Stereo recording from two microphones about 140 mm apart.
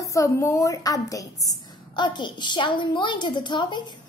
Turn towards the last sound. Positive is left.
turn(degrees=30)  # may be behind; listen again after turning